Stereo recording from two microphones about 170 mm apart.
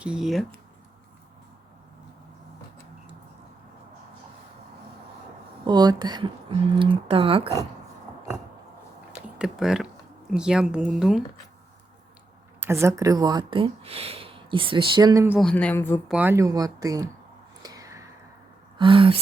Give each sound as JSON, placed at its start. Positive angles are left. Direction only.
{"t": 0.0, "sound": "speech", "side_deg": -5}
{"t": 5.6, "sound": "speech", "side_deg": -25}
{"t": 9.1, "sound": "a sound", "side_deg": -5}
{"t": 10.3, "sound": "speech", "side_deg": -5}
{"t": 12.5, "sound": "speech", "side_deg": -15}
{"t": 15.3, "sound": "speech", "side_deg": 0}
{"t": 16.0, "sound": "speech", "side_deg": -10}
{"t": 17.6, "sound": "a sound", "side_deg": -20}
{"t": 18.8, "sound": "a sound", "side_deg": -30}